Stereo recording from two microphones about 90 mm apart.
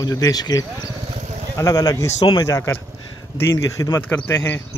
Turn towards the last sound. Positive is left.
turn(degrees=25)  # may be behind; listen again after turning